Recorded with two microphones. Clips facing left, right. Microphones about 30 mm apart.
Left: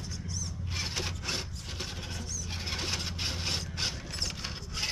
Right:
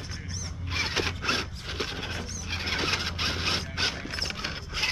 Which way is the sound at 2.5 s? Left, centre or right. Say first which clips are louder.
Right 7 dB; right.